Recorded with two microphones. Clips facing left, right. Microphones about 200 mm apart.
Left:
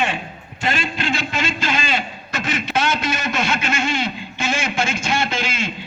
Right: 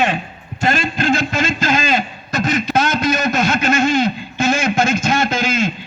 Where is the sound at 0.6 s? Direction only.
45° right (ahead or behind).